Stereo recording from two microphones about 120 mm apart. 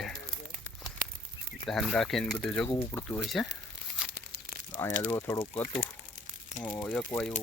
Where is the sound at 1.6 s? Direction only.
Centre (ahead or behind).